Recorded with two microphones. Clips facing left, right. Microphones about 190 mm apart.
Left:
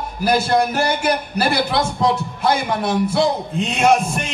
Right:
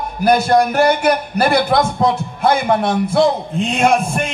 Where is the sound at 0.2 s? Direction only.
55° right (ahead or behind).